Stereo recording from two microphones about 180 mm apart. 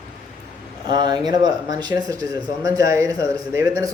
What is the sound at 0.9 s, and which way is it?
Speech, 25° right (ahead or behind).